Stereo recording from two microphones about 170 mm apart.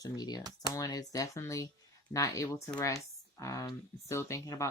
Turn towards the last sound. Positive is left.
turn(degrees=20)  # may be behind; listen again after turning